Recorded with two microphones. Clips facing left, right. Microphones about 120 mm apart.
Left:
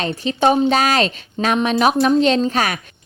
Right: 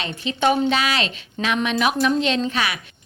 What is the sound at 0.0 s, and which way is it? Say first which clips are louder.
A woman's voice: left 4 dB; 35° left (ahead or behind).